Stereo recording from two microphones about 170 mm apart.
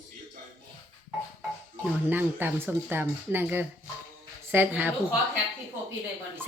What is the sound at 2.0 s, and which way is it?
Speech, 10° right (ahead or behind).